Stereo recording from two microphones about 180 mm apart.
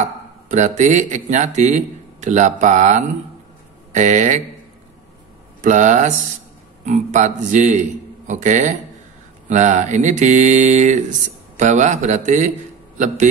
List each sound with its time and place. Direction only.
0.0 s speech: 45° right (ahead or behind)
5.6 s a man's voice: 45° right (ahead or behind)